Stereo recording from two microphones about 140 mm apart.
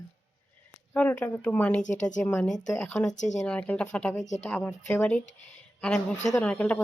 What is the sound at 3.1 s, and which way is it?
Speech, 60° left (ahead or behind).